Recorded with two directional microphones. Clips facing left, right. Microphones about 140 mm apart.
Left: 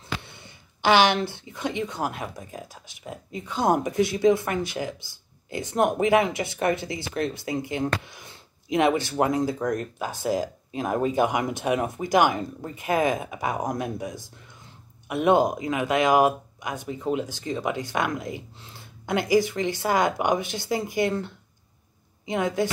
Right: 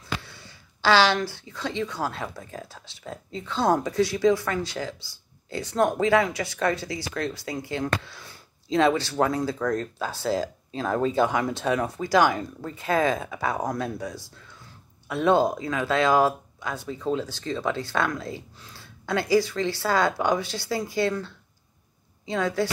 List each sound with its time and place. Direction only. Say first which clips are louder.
0.2 s speech: even; 20° left (ahead or behind)